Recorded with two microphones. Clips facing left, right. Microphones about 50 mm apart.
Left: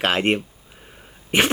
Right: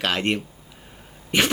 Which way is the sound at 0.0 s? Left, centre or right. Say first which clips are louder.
Left 3 dB; left.